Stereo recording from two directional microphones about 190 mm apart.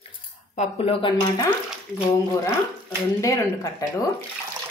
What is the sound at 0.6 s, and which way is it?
Speech, 30° left (ahead or behind).